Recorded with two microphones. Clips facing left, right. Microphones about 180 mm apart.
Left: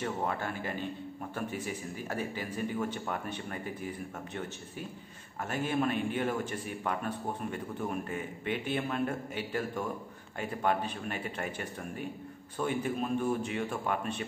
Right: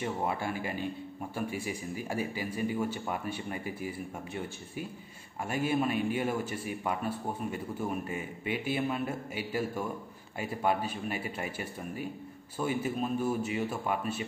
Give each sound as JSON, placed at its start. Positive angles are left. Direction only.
{"t": 0.0, "sound": "a man's voice", "side_deg": -10}
{"t": 5.5, "sound": "a man's voice", "side_deg": -10}